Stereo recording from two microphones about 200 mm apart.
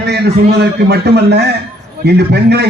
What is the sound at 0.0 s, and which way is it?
A man's voice, 55° right (ahead or behind).